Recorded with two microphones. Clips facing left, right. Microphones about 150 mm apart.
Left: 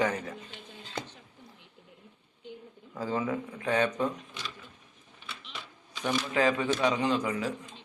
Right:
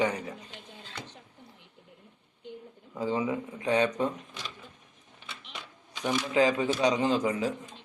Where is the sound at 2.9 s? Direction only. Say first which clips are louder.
Right 2 dB; 20° right (ahead or behind).